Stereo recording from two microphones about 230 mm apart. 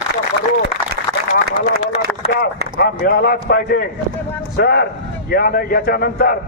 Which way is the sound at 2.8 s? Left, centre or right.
Left.